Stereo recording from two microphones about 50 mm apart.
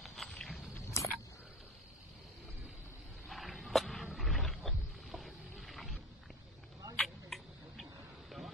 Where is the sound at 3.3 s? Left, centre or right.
Centre.